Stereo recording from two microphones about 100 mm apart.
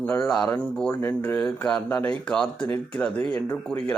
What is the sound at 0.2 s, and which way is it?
Speech, 5° left (ahead or behind).